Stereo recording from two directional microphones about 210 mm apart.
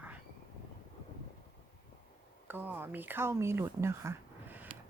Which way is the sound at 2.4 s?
10° right (ahead or behind).